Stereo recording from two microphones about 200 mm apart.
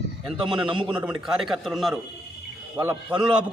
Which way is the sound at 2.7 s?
15° right (ahead or behind).